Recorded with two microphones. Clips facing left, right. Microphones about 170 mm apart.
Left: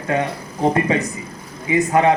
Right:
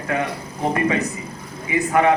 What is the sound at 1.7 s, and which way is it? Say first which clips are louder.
Speech: left 2 dB; 25° left (ahead or behind).